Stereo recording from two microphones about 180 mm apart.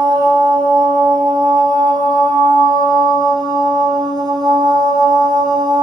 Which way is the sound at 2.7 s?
20° right (ahead or behind).